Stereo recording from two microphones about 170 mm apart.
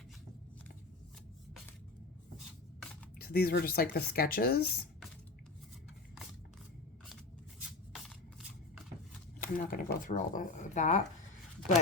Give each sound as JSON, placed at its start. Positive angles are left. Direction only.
{"t": 3.2, "sound": "speech", "side_deg": 65}
{"t": 7.9, "sound": "shuffling cards", "side_deg": 0}
{"t": 9.4, "sound": "speech", "side_deg": 55}